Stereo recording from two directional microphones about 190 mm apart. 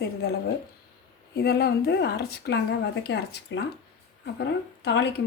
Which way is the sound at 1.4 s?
55° left (ahead or behind).